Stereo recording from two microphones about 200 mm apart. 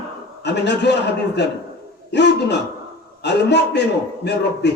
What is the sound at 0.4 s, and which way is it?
Speech, 60° left (ahead or behind).